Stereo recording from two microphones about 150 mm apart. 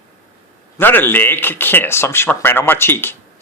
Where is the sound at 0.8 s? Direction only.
15° left (ahead or behind).